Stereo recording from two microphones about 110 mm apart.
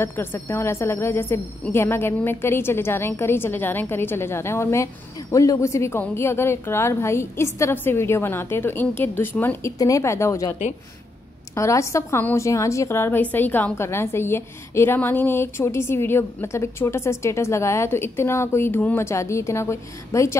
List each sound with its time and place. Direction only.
0.0 s a woman's voice: 20° left (ahead or behind)
11.5 s a woman's voice: 25° left (ahead or behind)